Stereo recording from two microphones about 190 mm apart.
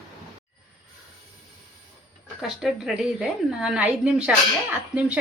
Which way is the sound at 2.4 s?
Centre (ahead or behind).